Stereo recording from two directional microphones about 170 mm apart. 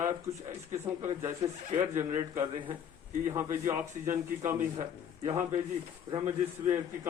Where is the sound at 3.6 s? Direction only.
15° right (ahead or behind).